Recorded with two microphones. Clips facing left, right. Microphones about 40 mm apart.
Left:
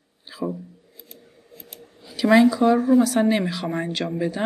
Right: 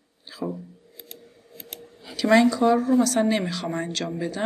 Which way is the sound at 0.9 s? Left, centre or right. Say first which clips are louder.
Right 2 dB; right.